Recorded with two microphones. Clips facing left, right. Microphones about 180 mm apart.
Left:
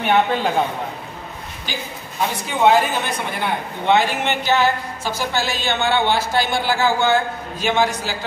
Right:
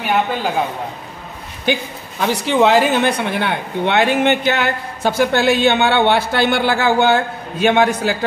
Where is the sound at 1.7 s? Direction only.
80° right.